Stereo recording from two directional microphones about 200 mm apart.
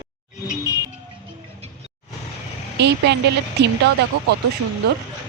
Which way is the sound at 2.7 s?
60° right (ahead or behind).